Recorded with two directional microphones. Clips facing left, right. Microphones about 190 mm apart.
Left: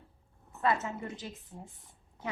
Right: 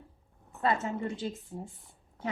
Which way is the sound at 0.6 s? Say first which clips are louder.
Right 2 dB; 30° right (ahead or behind).